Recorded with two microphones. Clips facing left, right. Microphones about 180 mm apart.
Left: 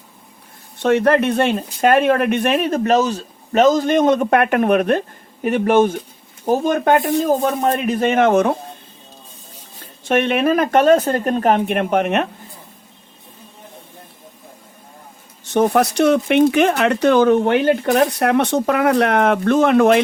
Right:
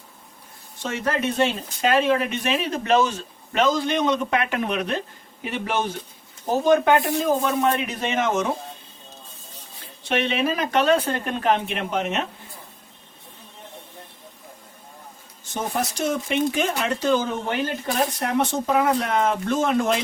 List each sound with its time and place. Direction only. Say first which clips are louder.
0.8 s speech: left 11 dB; 60° left (ahead or behind)
10.0 s speech: left 6 dB; 50° left (ahead or behind)
15.5 s speech: left 11 dB; 70° left (ahead or behind)